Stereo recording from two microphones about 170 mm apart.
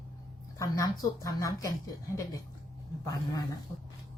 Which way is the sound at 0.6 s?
20° left (ahead or behind).